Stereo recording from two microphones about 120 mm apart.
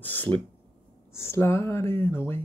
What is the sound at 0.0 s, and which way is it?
Speech, 15° left (ahead or behind).